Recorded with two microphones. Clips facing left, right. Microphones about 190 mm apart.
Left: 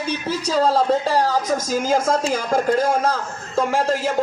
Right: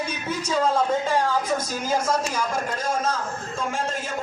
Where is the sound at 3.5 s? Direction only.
70° left (ahead or behind).